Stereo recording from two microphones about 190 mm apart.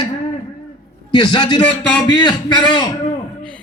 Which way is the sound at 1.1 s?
25° left (ahead or behind).